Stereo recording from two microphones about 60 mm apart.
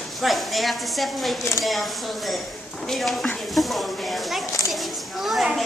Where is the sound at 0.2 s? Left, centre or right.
Centre.